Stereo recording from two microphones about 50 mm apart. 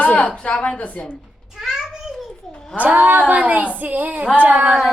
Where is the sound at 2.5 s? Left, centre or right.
Centre.